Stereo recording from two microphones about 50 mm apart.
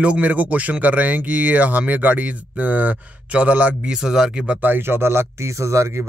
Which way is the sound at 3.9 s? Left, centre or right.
Centre.